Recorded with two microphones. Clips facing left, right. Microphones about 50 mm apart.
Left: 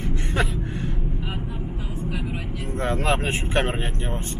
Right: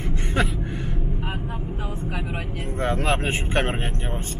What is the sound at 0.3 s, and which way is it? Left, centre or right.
Gasp, centre.